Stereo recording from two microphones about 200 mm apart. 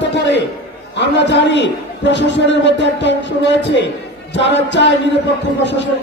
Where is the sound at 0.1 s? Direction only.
60° left (ahead or behind).